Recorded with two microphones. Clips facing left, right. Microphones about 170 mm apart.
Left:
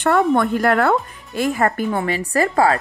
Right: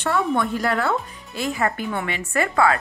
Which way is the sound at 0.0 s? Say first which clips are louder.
Left 6 dB; 50° left (ahead or behind).